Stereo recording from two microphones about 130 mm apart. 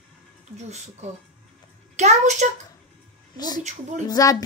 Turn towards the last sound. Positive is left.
turn(degrees=25)  # may be behind; listen again after turning